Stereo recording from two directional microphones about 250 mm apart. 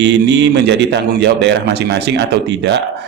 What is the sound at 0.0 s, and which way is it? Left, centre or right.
A man's voice, right.